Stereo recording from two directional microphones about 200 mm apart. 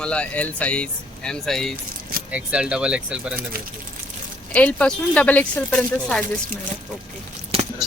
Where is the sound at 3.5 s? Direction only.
50° right (ahead or behind).